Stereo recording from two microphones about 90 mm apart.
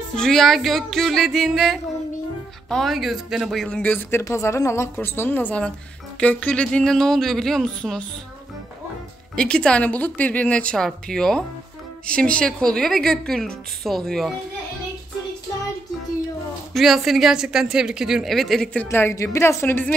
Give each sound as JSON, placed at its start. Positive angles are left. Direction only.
{"t": 0.1, "sound": "speech", "side_deg": 5}
{"t": 3.6, "sound": "a woman's voice", "side_deg": 10}
{"t": 4.2, "sound": "speech", "side_deg": 30}
{"t": 9.3, "sound": "a woman's voice", "side_deg": 10}
{"t": 16.7, "sound": "speech", "side_deg": 0}
{"t": 18.9, "sound": "speech", "side_deg": 30}